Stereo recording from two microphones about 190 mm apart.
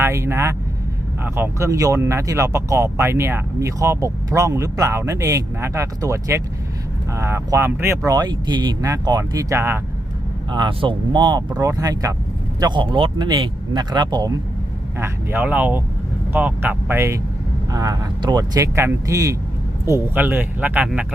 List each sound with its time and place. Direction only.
0.0 s speech: 15° right (ahead or behind)
10.5 s speech: 25° right (ahead or behind); by 21.1 s 5° right (ahead or behind)